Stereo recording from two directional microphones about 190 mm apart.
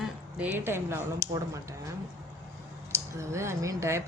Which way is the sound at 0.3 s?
10° right (ahead or behind).